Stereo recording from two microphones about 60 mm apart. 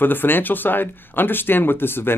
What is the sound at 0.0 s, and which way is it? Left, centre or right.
Speech, left.